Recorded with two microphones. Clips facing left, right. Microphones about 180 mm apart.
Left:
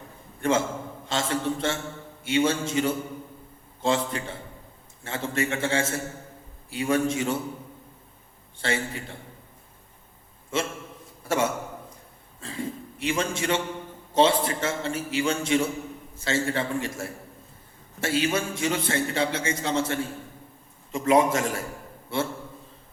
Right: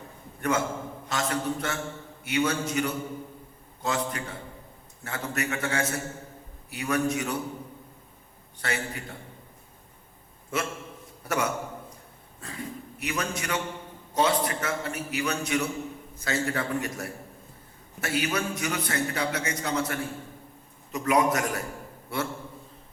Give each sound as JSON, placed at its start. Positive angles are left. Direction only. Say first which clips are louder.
{"t": 0.4, "sound": "a man's voice", "louder": "left 3 dB", "side_deg": 25}
{"t": 8.5, "sound": "a man's voice", "louder": "left 4 dB", "side_deg": 25}
{"t": 10.5, "sound": "a man's voice", "louder": "left 2 dB", "side_deg": 25}